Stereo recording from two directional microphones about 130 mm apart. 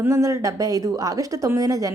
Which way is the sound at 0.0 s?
20° right (ahead or behind).